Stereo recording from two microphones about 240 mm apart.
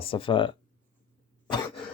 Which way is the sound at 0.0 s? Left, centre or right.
Left.